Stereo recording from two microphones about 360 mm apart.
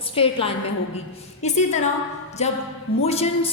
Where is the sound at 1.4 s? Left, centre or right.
Centre.